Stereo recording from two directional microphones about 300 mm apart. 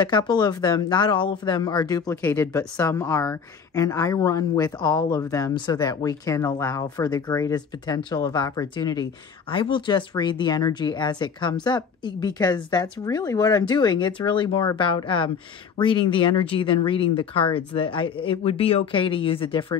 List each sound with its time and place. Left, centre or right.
0.0 s speech: centre